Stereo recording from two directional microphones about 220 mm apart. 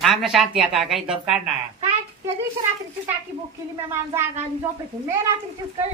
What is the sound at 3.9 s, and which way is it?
Speech, 10° right (ahead or behind).